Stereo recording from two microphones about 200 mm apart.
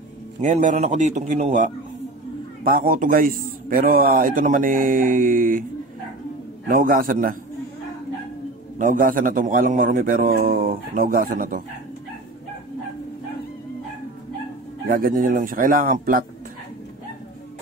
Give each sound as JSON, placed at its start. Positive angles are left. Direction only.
{"t": 0.4, "sound": "a man's voice", "side_deg": -40}
{"t": 6.7, "sound": "a man's voice", "side_deg": -45}
{"t": 8.7, "sound": "a man's voice", "side_deg": -40}
{"t": 14.9, "sound": "a man's voice", "side_deg": -45}